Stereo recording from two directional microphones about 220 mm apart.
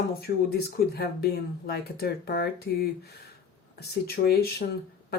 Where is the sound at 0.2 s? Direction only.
45° left (ahead or behind).